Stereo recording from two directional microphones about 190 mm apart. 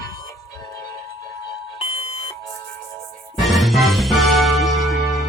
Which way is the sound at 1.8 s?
30° left (ahead or behind).